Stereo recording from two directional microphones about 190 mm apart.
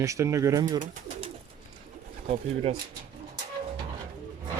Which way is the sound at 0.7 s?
40° right (ahead or behind).